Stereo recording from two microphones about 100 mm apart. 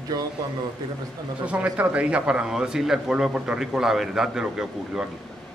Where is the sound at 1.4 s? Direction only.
15° right (ahead or behind).